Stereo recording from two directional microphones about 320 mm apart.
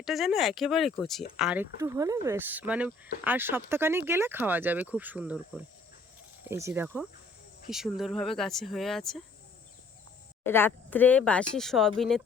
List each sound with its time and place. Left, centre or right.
0.0 s speech: centre
10.4 s speech: centre